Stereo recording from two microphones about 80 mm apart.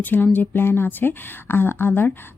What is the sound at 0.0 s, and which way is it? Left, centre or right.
Speech, left.